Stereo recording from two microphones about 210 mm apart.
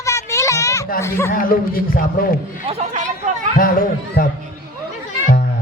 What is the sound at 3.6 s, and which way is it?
Speech, 45° left (ahead or behind).